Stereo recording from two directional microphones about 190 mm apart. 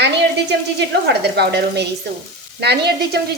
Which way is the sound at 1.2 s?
60° right (ahead or behind).